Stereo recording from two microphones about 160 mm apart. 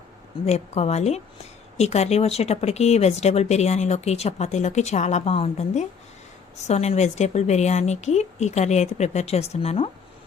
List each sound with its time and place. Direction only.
0.4 s a woman's voice: 40° left (ahead or behind)